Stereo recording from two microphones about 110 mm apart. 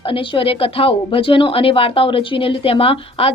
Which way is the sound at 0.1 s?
55° left (ahead or behind).